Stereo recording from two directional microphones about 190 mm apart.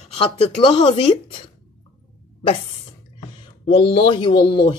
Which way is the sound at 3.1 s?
30° left (ahead or behind).